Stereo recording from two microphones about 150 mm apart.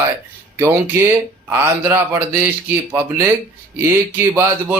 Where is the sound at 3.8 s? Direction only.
20° right (ahead or behind).